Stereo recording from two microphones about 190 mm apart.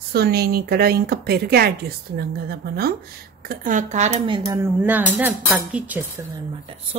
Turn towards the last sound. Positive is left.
turn(degrees=-10)  # may be behind; listen again after turning